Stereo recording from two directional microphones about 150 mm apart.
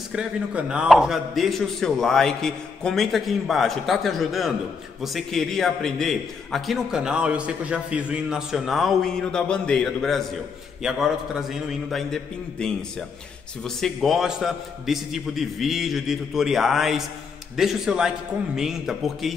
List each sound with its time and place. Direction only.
0.1 s a man's voice: 5° right (ahead or behind)